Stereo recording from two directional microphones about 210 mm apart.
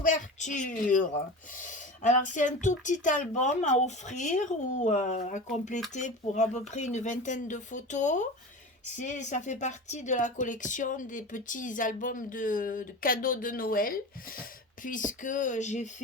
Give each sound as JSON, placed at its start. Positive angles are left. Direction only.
{"t": 0.0, "sound": "speech", "side_deg": 35}